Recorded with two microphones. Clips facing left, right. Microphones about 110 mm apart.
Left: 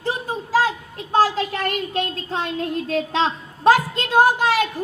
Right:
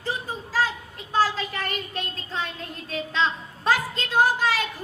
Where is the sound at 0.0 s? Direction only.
65° left (ahead or behind).